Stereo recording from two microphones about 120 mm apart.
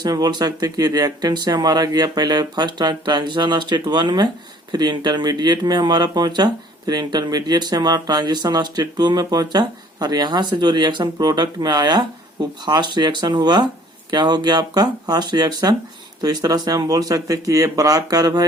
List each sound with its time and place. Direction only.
0.0 s speech: 35° right (ahead or behind)